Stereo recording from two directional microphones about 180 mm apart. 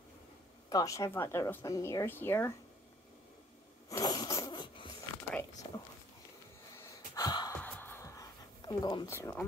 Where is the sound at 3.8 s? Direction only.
20° left (ahead or behind).